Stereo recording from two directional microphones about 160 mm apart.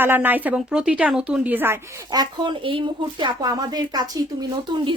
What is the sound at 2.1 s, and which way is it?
Speech, 25° right (ahead or behind).